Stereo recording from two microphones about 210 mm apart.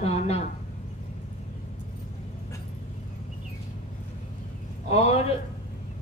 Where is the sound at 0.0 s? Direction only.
30° left (ahead or behind).